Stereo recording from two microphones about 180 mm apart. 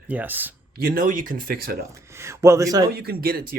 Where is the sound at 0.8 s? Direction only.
50° right (ahead or behind).